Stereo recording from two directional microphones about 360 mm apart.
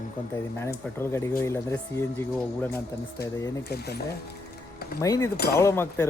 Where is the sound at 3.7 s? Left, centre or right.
Left.